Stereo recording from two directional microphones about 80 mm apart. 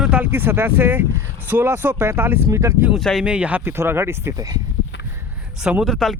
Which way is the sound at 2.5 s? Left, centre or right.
Right.